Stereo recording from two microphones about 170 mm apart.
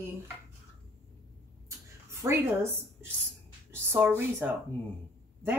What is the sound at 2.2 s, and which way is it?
Speech, 15° right (ahead or behind).